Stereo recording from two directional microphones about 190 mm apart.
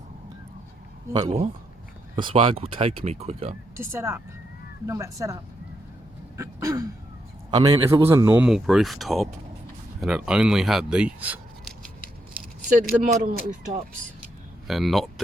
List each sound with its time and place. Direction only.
1.1 s speech: 25° right (ahead or behind)
3.8 s speech: 15° right (ahead or behind)
6.3 s throat clearing: 15° right (ahead or behind)
7.5 s speech: 20° right (ahead or behind)
8.4 s speech: centre (ahead or behind)
12.3 s speech: 50° right (ahead or behind)
14.7 s speech: centre (ahead or behind)